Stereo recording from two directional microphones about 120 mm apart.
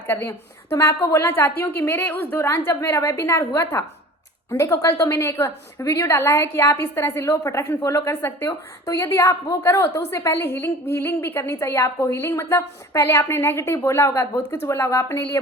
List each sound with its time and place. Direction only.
0.1 s a woman's voice: 20° left (ahead or behind)